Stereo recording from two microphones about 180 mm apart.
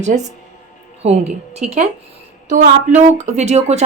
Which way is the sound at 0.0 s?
40° right (ahead or behind).